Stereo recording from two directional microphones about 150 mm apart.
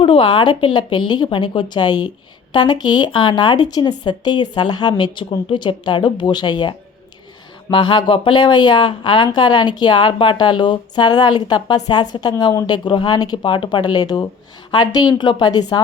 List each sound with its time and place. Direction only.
0.0 s speech: 35° left (ahead or behind)